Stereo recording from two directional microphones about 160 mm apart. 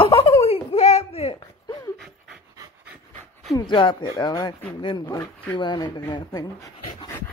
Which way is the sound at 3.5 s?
30° left (ahead or behind).